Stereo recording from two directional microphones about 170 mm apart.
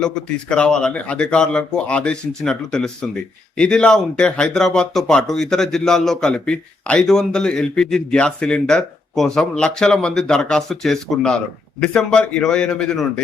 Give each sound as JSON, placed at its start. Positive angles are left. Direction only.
{"t": 0.0, "sound": "speech", "side_deg": 5}